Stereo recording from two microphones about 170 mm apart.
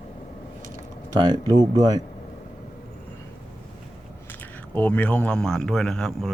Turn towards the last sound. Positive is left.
turn(degrees=0)  # may be behind; listen again after turning